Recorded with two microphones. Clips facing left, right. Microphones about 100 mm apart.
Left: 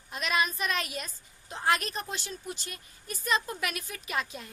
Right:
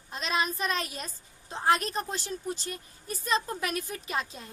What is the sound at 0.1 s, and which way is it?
A woman's voice, 30° right (ahead or behind).